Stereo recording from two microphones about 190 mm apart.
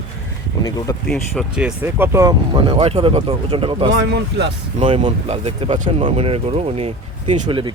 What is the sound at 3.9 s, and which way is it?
Speech, 65° right (ahead or behind).